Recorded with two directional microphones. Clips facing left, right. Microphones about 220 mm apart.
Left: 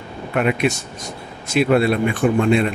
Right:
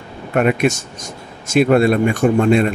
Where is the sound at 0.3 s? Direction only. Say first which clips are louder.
Right 3 dB; 45° right (ahead or behind).